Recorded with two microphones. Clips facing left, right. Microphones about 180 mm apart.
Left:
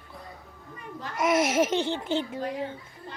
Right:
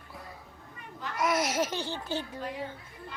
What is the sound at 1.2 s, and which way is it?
A child's voice, 25° left (ahead or behind).